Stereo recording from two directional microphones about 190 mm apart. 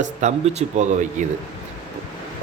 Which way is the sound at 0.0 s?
35° right (ahead or behind).